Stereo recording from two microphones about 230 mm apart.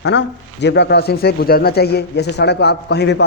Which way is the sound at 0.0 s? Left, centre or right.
Left.